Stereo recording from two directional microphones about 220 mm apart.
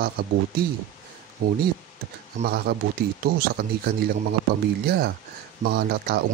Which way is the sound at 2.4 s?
45° right (ahead or behind).